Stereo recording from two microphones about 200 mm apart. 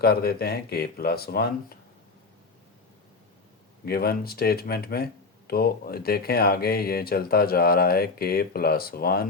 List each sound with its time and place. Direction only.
0.0 s speech: 50° left (ahead or behind)
3.8 s speech: 50° left (ahead or behind)